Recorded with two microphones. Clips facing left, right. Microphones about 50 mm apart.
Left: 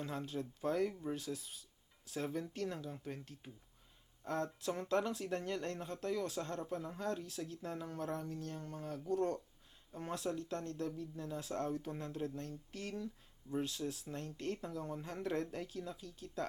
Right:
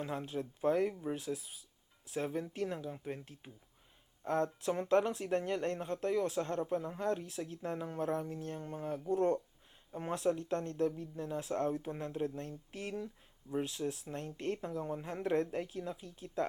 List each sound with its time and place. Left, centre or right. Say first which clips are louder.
0.0 s speech: right 3 dB; centre